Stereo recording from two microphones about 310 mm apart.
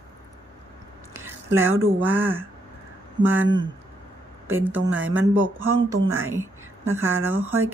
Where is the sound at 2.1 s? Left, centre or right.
Centre.